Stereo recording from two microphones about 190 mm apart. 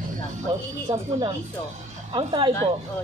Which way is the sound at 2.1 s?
25° right (ahead or behind).